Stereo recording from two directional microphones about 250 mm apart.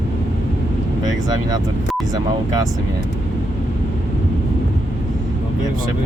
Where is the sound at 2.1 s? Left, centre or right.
Centre.